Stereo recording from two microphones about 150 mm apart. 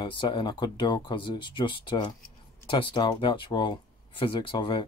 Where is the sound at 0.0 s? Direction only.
30° left (ahead or behind).